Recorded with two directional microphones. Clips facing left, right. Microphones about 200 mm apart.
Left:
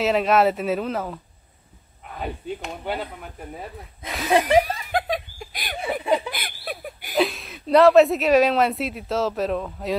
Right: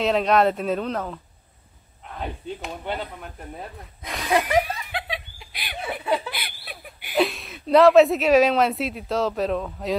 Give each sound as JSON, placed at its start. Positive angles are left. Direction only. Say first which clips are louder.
{"t": 0.0, "sound": "a woman's voice", "louder": "left 1 dB", "side_deg": 5}
{"t": 4.4, "sound": "laughter", "louder": "left 4 dB", "side_deg": 40}
{"t": 6.3, "sound": "a sound", "louder": "left 5 dB", "side_deg": 45}
{"t": 7.2, "sound": "a woman's voice", "louder": "even", "side_deg": 0}